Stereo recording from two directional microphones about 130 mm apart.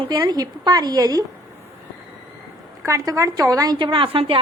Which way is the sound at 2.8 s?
20° right (ahead or behind).